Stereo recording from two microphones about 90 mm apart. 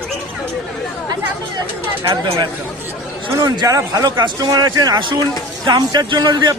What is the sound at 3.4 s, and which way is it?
A man's voice, 45° right (ahead or behind).